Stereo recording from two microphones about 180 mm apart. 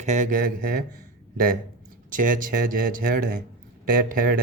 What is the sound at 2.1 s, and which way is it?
Speech, 50° right (ahead or behind).